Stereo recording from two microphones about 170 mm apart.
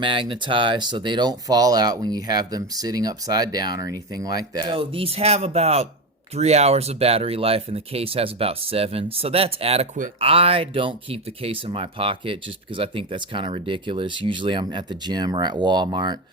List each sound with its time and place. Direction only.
0.0 s speech: 30° right (ahead or behind)